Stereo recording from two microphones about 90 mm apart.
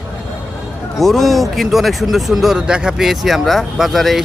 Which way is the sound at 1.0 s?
Centre (ahead or behind).